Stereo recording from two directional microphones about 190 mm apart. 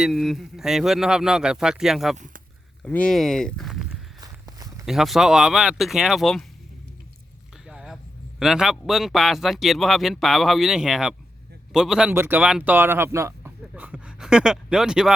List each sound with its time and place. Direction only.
0.0 s a man's voice: centre (ahead or behind)
2.1 s speech: 40° right (ahead or behind)
2.8 s speech: 5° left (ahead or behind)
4.2 s walk: 20° right (ahead or behind)
4.9 s a man's voice: centre (ahead or behind)
7.7 s a sound: 5° right (ahead or behind)
8.4 s a man's voice: centre (ahead or behind)